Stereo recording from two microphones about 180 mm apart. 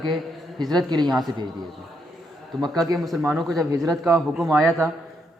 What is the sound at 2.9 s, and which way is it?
A man's voice, centre (ahead or behind).